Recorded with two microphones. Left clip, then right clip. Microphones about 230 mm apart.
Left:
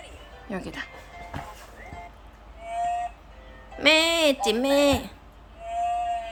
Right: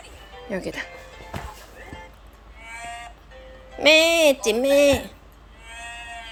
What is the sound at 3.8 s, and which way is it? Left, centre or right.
Speech, centre.